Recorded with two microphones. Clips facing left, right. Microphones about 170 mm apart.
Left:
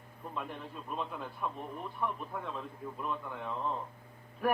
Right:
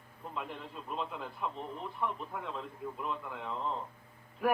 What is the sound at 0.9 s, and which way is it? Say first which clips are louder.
Speech: even; centre (ahead or behind).